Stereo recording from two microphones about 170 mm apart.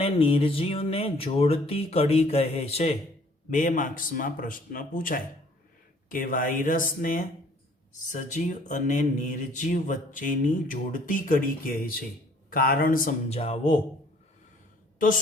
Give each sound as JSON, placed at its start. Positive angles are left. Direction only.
{"t": 0.0, "sound": "speech", "side_deg": 35}
{"t": 3.5, "sound": "a man's voice", "side_deg": 50}
{"t": 13.3, "sound": "speech", "side_deg": 35}